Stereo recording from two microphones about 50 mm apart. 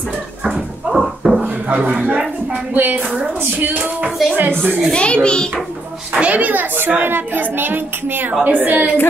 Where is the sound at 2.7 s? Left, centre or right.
Right.